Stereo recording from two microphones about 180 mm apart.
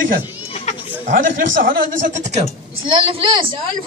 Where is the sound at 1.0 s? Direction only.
50° right (ahead or behind).